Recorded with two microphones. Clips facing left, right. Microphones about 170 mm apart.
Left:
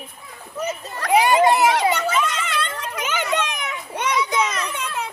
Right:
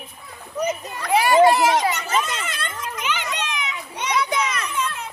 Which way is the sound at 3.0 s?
45° left (ahead or behind).